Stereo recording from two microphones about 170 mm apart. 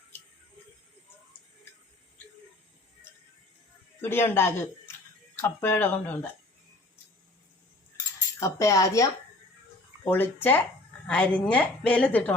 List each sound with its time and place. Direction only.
4.0 s a woman's voice: 15° left (ahead or behind)
8.4 s a woman's voice: 20° left (ahead or behind)